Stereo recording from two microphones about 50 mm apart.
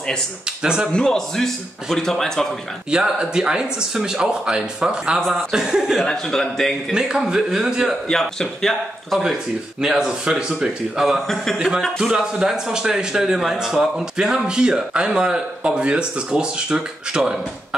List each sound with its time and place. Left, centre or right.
0.6 s speech: centre
0.9 s a man's voice: centre
2.9 s a man's voice: centre
6.0 s a man's voice: centre
6.9 s a man's voice: centre
8.1 s a man's voice: centre
9.2 s a man's voice: centre
11.0 s speech: centre
11.5 s a man's voice: centre